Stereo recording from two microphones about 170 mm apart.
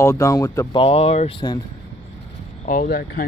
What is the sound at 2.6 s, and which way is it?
Speech, 50° left (ahead or behind).